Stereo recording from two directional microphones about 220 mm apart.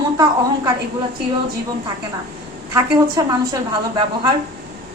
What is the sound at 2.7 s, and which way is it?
Speech, 15° right (ahead or behind).